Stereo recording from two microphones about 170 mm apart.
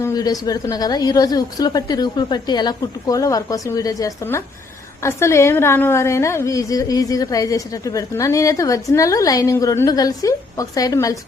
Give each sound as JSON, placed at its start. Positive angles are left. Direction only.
{"t": 0.0, "sound": "a woman's voice", "side_deg": 20}